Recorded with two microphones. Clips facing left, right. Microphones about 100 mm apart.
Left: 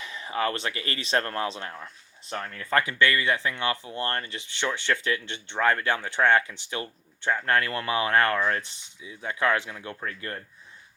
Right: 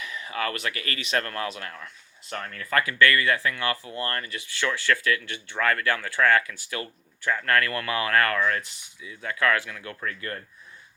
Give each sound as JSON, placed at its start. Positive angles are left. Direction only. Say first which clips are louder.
{"t": 0.0, "sound": "speech", "louder": "left 2 dB", "side_deg": 30}